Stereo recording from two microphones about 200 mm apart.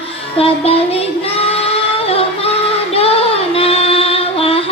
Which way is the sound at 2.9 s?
30° left (ahead or behind).